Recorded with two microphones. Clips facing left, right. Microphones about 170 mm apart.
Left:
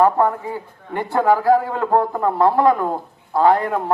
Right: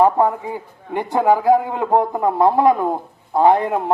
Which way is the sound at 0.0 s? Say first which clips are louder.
Right 1 dB; 15° right (ahead or behind).